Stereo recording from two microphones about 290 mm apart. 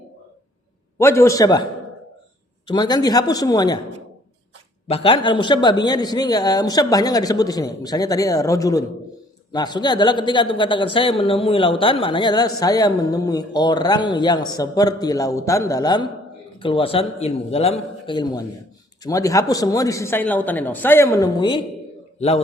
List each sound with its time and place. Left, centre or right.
0.9 s a man's voice: centre
2.6 s a man's voice: centre
4.9 s a man's voice: centre